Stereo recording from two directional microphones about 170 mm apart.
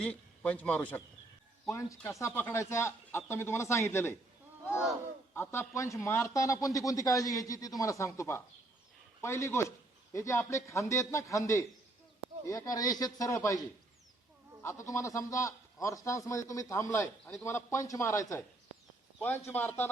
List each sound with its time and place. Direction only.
0.0 s speech: 5° left (ahead or behind)
5.3 s a man's voice: 15° left (ahead or behind)
14.6 s a man's voice: 15° left (ahead or behind)